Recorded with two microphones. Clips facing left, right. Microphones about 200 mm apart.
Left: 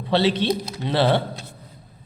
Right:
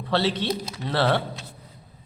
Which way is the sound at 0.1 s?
20° left (ahead or behind).